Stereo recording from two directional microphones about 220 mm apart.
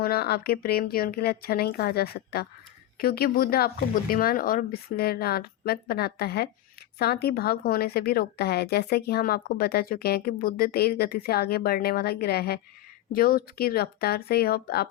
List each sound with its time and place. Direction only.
0.0 s a woman's voice: 45° left (ahead or behind)